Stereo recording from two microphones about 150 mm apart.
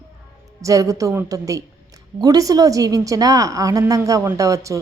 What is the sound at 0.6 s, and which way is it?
A woman's voice, 20° right (ahead or behind).